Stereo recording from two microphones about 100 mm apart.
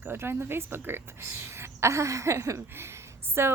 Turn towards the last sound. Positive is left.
turn(degrees=-25)  # may be behind; listen again after turning